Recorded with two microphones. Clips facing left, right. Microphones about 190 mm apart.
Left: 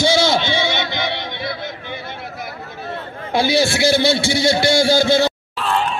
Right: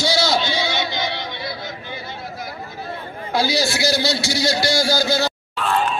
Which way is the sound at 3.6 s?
55° left (ahead or behind).